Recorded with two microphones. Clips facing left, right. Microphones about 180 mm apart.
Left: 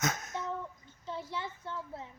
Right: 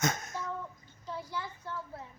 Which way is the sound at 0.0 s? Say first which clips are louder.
Right 2 dB; 5° left (ahead or behind).